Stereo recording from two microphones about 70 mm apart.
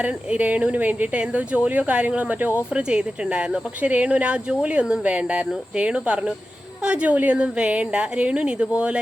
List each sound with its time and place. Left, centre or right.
0.0 s speech: right
2.9 s speech: centre